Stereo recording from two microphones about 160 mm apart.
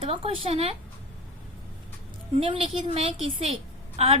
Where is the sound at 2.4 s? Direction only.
35° right (ahead or behind).